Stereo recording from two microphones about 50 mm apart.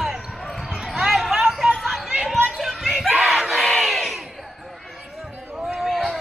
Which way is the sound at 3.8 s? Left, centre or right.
Centre.